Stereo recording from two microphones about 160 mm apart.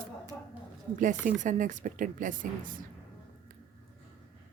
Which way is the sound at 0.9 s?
55° right (ahead or behind).